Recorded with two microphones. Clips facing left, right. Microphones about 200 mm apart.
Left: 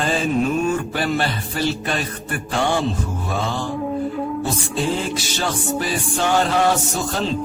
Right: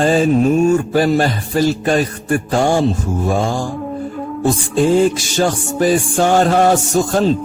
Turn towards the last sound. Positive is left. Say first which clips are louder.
# right 9 dB
turn(degrees=-45)  # may be behind; listen again after turning